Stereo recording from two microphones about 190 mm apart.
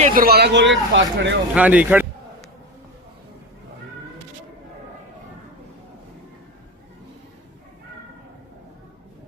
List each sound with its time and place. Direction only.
0.1 s speech: 50° right (ahead or behind); by 1.4 s 70° right (ahead or behind)
1.5 s speech: 5° right (ahead or behind)